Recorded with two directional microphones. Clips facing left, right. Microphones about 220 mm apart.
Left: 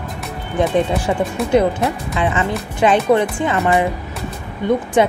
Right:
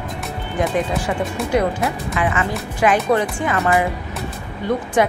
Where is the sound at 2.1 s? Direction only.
25° left (ahead or behind).